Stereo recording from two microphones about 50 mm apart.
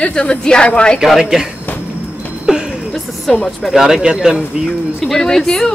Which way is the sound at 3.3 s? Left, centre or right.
Centre.